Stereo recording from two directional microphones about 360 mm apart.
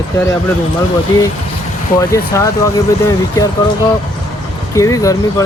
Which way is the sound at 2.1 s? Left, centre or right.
Centre.